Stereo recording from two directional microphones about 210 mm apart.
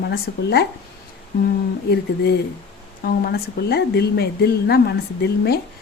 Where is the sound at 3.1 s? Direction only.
45° left (ahead or behind).